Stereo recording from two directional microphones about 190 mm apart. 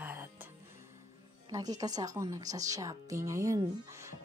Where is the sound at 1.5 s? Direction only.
20° right (ahead or behind).